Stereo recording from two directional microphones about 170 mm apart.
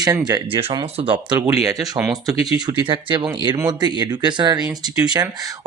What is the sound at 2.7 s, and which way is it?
Speech, 30° right (ahead or behind).